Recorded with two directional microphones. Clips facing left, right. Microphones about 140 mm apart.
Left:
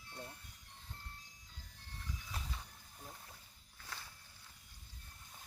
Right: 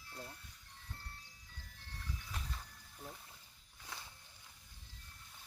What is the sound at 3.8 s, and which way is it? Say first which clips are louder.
Walk: even; 15° right (ahead or behind).